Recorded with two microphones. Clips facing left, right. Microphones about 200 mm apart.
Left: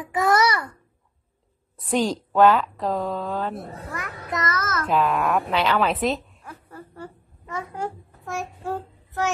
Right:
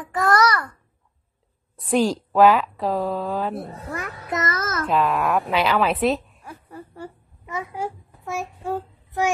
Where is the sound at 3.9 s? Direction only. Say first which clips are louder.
Right 3 dB; 25° right (ahead or behind).